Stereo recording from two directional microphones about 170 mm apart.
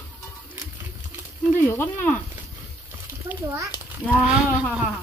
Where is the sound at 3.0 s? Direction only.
15° right (ahead or behind).